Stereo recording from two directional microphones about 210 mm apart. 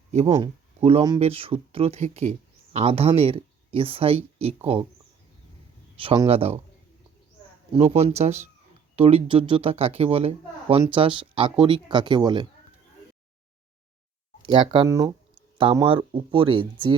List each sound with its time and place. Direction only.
0.1 s speech: 30° right (ahead or behind)
6.0 s speech: 25° right (ahead or behind)
7.7 s speech: 30° right (ahead or behind)
14.4 s speech: 25° right (ahead or behind)